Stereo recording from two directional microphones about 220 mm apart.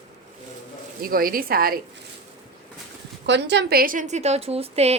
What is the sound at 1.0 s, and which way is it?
Speech, 40° right (ahead or behind).